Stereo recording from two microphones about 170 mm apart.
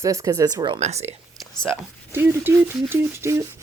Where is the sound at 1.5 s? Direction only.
5° left (ahead or behind).